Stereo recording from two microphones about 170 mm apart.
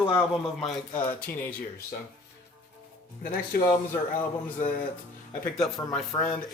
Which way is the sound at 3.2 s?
60° left (ahead or behind).